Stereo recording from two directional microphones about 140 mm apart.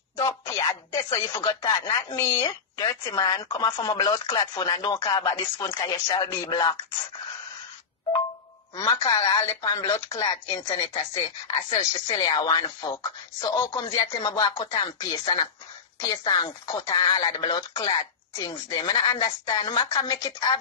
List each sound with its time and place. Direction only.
0.5 s speech: 25° left (ahead or behind)
8.8 s speech: 25° left (ahead or behind)
11.7 s speech: 35° left (ahead or behind)